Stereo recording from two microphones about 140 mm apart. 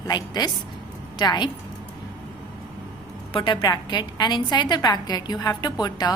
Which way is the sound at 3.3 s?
35° left (ahead or behind).